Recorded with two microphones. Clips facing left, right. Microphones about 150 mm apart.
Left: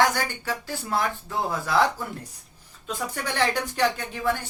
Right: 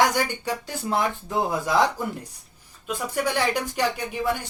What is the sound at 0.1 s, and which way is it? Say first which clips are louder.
Speech: right 3 dB; 20° right (ahead or behind).